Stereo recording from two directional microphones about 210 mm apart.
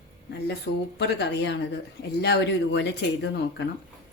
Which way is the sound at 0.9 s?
55° left (ahead or behind).